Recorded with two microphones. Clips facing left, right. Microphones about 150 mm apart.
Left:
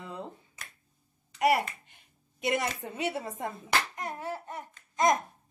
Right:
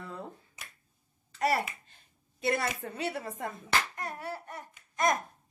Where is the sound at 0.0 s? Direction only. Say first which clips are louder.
Left 1 dB; 20° left (ahead or behind).